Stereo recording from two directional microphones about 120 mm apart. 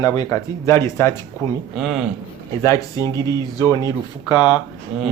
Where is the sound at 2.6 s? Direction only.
25° left (ahead or behind).